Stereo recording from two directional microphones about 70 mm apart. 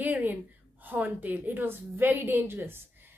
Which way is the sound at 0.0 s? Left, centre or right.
Right.